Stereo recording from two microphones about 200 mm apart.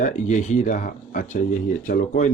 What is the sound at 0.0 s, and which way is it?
Speech, 40° left (ahead or behind).